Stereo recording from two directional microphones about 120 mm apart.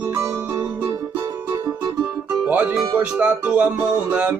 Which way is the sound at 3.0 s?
15° right (ahead or behind).